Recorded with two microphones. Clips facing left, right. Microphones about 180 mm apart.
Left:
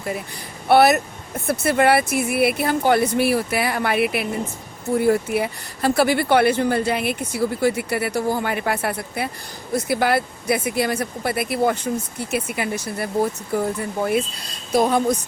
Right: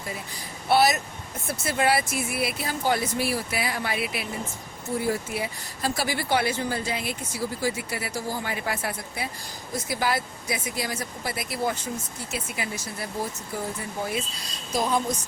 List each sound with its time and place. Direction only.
0.7 s speech: 60° left (ahead or behind)